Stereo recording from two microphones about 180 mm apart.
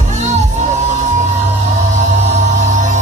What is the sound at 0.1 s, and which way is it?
Music, 40° right (ahead or behind).